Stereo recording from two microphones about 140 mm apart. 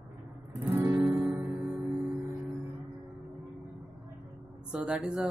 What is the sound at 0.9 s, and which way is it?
Music, 10° right (ahead or behind).